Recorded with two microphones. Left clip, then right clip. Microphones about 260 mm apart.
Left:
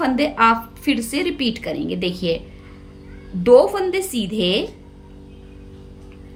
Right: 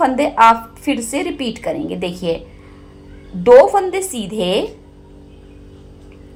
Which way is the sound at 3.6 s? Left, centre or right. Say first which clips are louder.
Right 5 dB; centre.